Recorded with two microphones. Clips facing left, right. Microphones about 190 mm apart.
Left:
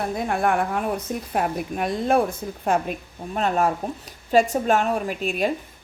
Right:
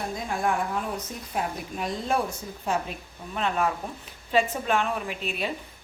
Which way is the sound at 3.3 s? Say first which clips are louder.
Left 5 dB; 40° left (ahead or behind).